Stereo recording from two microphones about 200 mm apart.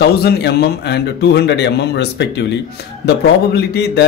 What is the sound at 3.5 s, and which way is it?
Speech, 55° left (ahead or behind).